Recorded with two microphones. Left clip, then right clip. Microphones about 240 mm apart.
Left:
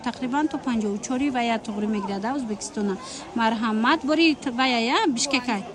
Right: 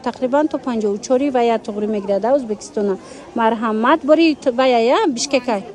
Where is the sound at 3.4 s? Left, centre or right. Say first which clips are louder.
Right 7 dB; centre.